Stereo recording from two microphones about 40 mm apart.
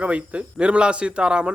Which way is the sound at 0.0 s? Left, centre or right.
Right.